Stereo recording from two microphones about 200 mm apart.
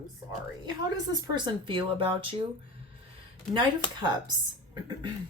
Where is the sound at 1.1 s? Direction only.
20° right (ahead or behind).